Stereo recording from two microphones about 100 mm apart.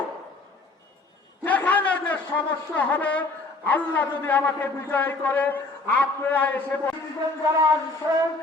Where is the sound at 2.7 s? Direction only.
15° left (ahead or behind).